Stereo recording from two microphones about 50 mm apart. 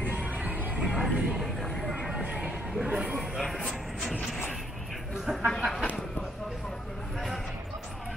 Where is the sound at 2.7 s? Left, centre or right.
Centre.